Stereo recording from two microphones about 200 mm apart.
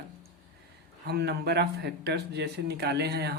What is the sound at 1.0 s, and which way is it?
Speech, 55° right (ahead or behind).